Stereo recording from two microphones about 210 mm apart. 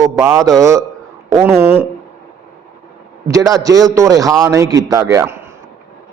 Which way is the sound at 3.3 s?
15° right (ahead or behind).